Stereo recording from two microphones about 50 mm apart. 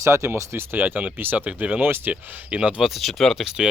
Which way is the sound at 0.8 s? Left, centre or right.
Right.